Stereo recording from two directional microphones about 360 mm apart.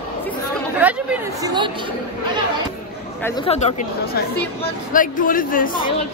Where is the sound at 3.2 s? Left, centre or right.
Centre.